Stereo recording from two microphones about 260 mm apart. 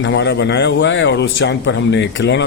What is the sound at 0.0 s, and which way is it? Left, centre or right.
A man's voice, left.